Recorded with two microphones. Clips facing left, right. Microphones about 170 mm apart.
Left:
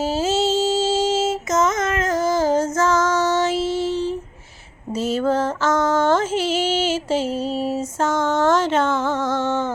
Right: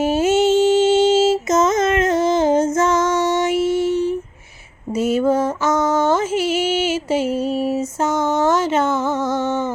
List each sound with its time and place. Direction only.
0.0 s music: 20° right (ahead or behind)